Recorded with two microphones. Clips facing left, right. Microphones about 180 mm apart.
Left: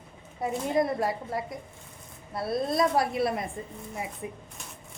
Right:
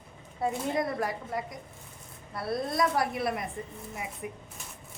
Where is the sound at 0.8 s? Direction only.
25° left (ahead or behind).